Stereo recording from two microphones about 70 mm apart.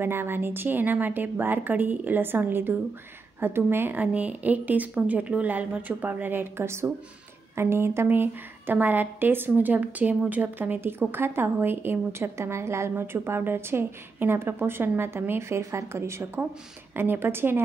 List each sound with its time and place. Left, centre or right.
0.0 s a woman's voice: right